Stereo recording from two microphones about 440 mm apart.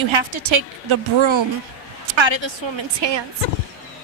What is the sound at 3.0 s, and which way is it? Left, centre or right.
Speech, right.